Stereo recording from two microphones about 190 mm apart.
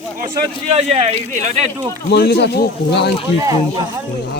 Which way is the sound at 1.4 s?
35° right (ahead or behind).